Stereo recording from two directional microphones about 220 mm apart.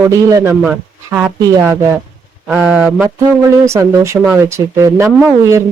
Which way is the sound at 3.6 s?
10° right (ahead or behind).